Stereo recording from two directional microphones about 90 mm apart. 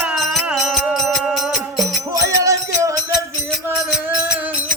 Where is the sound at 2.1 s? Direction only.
40° right (ahead or behind).